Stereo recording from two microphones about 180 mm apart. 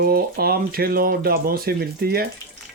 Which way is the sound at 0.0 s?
55° right (ahead or behind).